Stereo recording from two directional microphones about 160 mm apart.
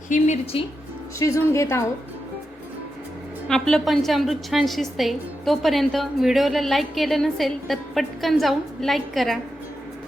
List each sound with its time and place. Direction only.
0.1 s speech: 45° left (ahead or behind)
1.2 s speech: 20° left (ahead or behind)
3.5 s a woman's voice: centre (ahead or behind)